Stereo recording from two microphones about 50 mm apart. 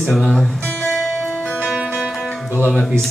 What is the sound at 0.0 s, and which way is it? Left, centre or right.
Speech, centre.